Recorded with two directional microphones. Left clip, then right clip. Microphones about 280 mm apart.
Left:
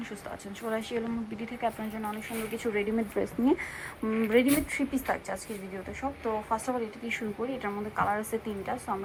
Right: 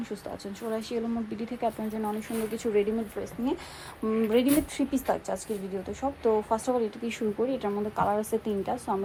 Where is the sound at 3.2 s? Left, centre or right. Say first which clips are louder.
Left 4 dB; centre.